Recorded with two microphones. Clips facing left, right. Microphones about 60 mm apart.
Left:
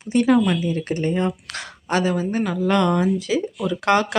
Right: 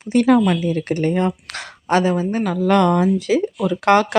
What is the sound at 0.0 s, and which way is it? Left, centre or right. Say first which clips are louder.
A woman's voice: right 3 dB; right.